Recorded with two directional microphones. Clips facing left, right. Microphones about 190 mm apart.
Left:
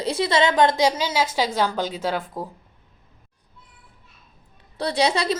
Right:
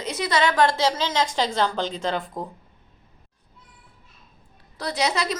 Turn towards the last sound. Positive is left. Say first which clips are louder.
# left 4 dB
turn(degrees=30)  # may be behind; listen again after turning